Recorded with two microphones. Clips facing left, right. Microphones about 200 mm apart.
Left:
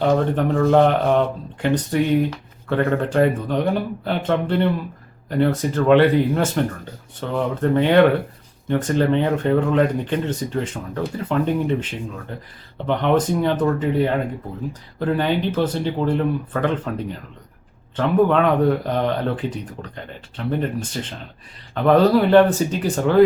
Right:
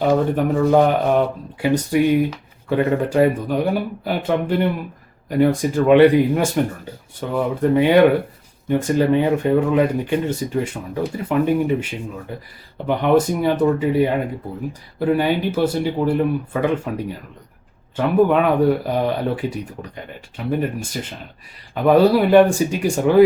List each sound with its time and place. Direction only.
0.0 s speech: 5° right (ahead or behind)